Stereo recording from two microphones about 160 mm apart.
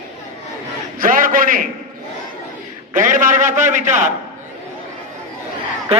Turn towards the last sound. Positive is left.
turn(degrees=-40)  # may be behind; listen again after turning